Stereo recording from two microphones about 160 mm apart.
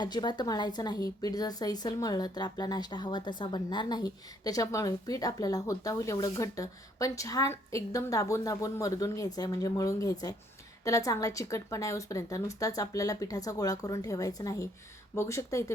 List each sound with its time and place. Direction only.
0.0 s a woman's voice: 25° left (ahead or behind)